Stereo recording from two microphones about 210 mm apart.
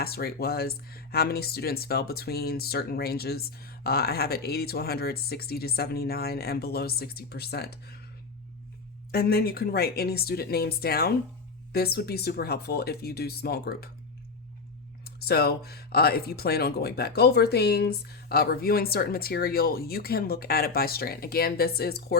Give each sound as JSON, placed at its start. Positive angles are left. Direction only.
{"t": 0.0, "sound": "speech", "side_deg": 45}
{"t": 9.1, "sound": "speech", "side_deg": 45}
{"t": 15.0, "sound": "speech", "side_deg": 45}